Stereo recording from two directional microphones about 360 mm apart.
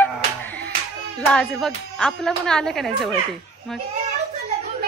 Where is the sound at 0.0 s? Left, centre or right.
Centre.